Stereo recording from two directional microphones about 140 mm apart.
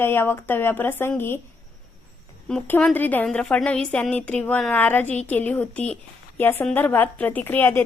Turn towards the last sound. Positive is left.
turn(degrees=15)  # may be behind; listen again after turning